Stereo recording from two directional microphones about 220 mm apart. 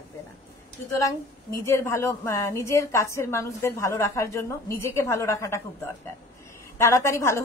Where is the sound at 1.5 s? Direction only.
10° left (ahead or behind).